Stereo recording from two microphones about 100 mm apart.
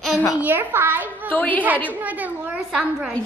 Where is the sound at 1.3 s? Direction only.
15° left (ahead or behind).